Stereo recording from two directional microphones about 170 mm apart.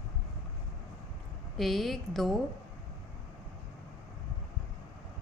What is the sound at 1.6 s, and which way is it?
Speech, centre (ahead or behind).